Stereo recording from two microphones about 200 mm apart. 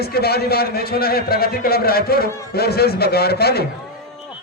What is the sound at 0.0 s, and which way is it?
A man's voice, 50° left (ahead or behind).